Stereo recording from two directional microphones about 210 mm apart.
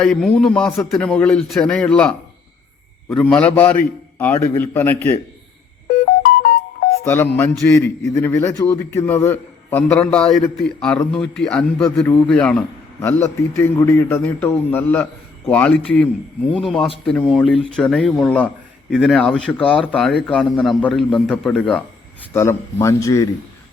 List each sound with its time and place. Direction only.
0.0 s speech: 5° left (ahead or behind)
3.2 s a man's voice: 5° left (ahead or behind)
6.1 s music: 50° left (ahead or behind)
7.0 s a man's voice: 10° left (ahead or behind)